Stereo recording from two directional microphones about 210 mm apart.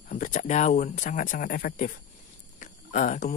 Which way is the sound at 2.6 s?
35° left (ahead or behind).